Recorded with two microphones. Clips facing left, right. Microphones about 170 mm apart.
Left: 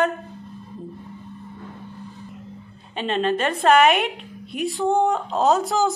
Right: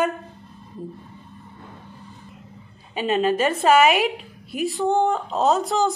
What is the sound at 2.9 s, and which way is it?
A woman's voice, 5° right (ahead or behind).